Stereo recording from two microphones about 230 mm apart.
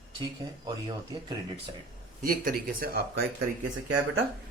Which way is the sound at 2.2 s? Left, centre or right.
Right.